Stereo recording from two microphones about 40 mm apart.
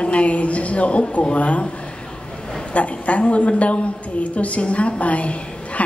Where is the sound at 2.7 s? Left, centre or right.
Left.